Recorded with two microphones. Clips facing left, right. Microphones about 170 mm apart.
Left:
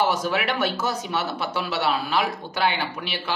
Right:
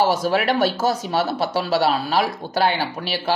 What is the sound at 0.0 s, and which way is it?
A man's voice, 35° right (ahead or behind).